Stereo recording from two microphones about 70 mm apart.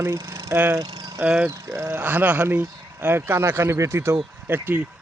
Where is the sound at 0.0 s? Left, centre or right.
Right.